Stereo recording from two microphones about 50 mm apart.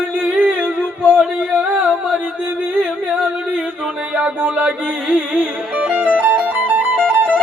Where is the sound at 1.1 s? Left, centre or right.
Right.